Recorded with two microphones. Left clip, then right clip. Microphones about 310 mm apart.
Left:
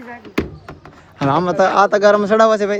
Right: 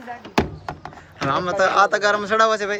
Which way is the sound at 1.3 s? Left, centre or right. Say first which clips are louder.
Left 4 dB; centre.